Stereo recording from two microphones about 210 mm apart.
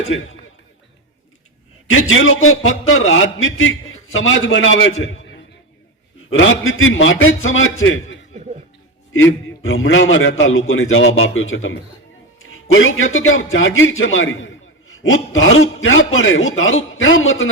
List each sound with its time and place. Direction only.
1.9 s a man's voice: 70° left (ahead or behind)